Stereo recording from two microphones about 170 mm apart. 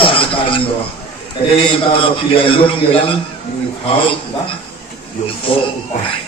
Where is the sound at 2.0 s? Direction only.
30° left (ahead or behind).